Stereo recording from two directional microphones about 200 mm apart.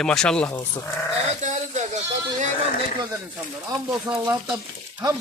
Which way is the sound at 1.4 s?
35° right (ahead or behind).